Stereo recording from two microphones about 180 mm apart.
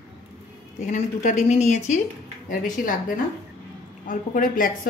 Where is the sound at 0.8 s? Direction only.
40° left (ahead or behind).